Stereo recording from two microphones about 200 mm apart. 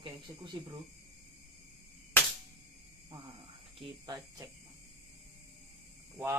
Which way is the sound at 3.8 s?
25° right (ahead or behind).